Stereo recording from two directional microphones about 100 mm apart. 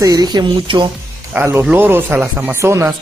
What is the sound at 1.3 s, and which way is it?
Speech, 20° right (ahead or behind).